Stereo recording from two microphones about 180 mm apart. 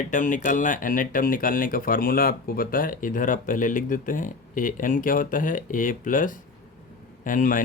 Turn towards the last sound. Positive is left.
turn(degrees=45)  # may be behind; listen again after turning